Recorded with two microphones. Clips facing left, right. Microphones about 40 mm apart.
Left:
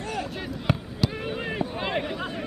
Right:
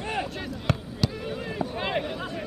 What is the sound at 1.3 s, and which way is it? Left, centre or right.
Fireworks, left.